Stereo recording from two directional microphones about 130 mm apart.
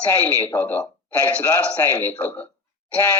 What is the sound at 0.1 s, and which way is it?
A man's voice, 15° left (ahead or behind).